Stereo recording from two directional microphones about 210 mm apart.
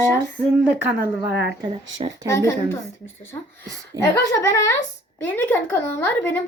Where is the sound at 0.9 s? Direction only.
50° right (ahead or behind).